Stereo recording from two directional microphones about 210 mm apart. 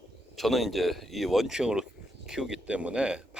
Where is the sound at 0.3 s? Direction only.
Centre (ahead or behind).